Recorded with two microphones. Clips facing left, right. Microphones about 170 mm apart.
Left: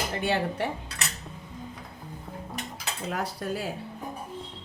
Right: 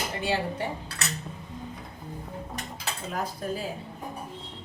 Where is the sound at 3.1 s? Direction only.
75° left (ahead or behind).